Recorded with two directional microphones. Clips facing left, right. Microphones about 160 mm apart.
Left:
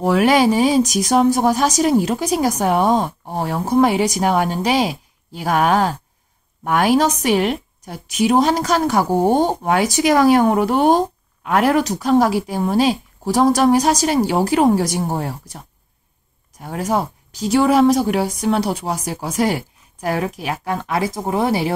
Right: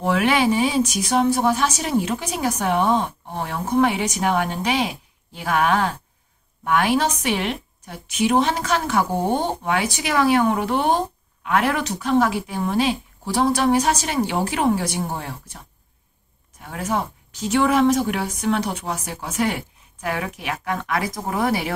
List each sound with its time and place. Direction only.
0.0 s a woman's voice: 40° left (ahead or behind)